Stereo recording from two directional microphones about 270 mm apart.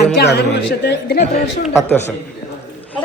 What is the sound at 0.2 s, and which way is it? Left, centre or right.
Speech, left.